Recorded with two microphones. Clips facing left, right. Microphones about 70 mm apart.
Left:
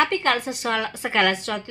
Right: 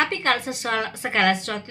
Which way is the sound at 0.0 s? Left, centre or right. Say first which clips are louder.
Left 2 dB; right.